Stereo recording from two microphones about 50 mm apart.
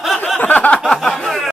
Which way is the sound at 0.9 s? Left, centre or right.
Centre.